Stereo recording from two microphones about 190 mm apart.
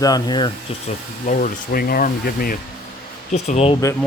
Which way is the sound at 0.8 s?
45° left (ahead or behind).